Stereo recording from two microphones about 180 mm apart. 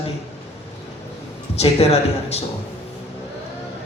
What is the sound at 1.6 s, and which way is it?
Speech, 35° left (ahead or behind).